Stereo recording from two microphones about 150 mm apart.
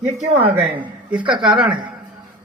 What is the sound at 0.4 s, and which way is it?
Speech, 10° right (ahead or behind).